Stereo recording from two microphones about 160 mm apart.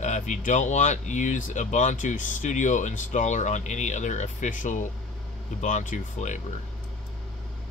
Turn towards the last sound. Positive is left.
turn(degrees=50)  # may be behind; listen again after turning